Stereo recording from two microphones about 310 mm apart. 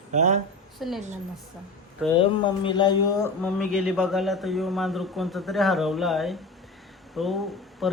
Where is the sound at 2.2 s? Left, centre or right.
Centre.